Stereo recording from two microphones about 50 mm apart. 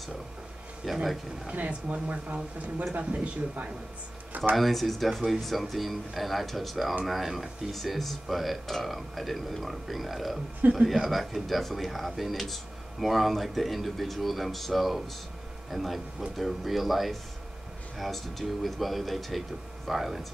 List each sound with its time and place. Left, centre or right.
0.8 s speech: centre
1.5 s speech: right
4.6 s speech: centre